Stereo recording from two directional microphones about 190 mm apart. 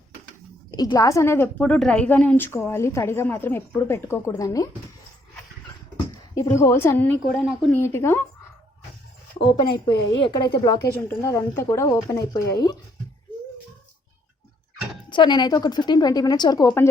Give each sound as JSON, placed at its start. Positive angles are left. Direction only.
{"t": 0.7, "sound": "a woman's voice", "side_deg": 20}
{"t": 6.3, "sound": "a woman's voice", "side_deg": 15}
{"t": 9.4, "sound": "a woman's voice", "side_deg": 25}
{"t": 15.1, "sound": "a woman's voice", "side_deg": 25}